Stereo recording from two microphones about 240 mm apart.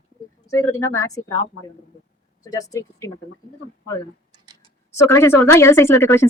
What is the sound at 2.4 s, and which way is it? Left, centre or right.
Speech, centre.